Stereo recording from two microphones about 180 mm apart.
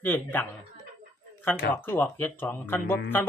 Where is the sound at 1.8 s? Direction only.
10° left (ahead or behind).